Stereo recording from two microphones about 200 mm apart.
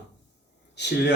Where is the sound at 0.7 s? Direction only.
60° left (ahead or behind).